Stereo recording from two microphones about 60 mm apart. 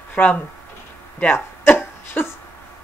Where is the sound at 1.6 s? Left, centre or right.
Left.